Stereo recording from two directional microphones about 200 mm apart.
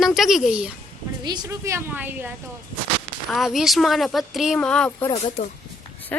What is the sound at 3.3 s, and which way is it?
Speech, centre (ahead or behind).